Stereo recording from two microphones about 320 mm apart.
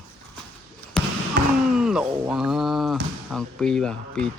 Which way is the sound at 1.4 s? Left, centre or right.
Right.